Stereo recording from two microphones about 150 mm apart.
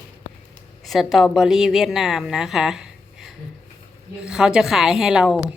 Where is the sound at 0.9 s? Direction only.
Centre (ahead or behind).